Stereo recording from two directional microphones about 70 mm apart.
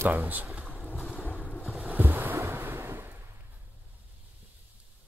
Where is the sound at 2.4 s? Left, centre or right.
Right.